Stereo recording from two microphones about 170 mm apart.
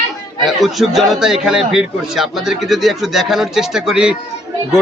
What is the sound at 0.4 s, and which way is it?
Speech, centre (ahead or behind).